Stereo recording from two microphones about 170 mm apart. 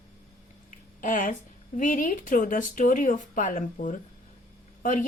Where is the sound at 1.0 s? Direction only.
50° left (ahead or behind).